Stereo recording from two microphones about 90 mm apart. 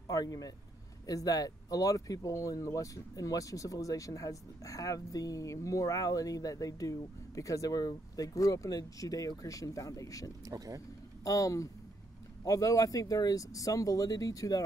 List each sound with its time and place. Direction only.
0.1 s speech: 40° left (ahead or behind)
10.4 s speech: 40° right (ahead or behind)
11.2 s speech: 40° left (ahead or behind)